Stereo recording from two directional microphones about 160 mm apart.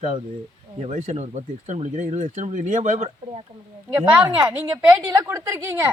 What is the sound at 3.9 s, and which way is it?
Speech, 15° right (ahead or behind).